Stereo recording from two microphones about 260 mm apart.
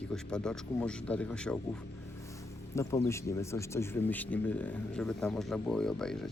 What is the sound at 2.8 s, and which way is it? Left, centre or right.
Speech, centre.